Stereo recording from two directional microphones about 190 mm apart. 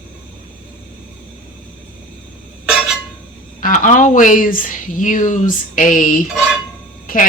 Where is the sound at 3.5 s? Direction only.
45° left (ahead or behind).